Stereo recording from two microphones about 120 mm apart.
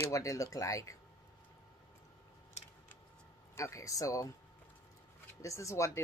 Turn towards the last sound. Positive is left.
turn(degrees=25)  # may be behind; listen again after turning